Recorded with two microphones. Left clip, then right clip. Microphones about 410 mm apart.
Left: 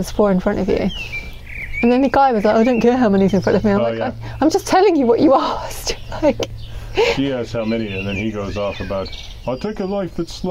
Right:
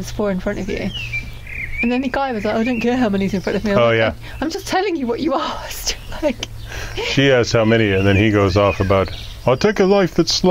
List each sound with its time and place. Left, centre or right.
0.0 s speech: left
7.2 s speech: right